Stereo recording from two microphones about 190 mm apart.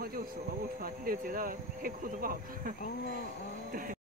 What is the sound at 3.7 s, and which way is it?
Vehicle, 45° right (ahead or behind).